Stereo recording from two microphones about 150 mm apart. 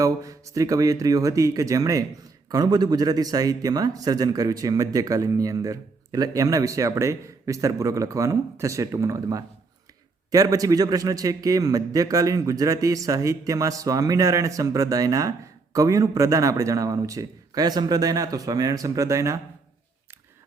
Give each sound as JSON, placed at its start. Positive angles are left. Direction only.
{"t": 0.0, "sound": "speech", "side_deg": -20}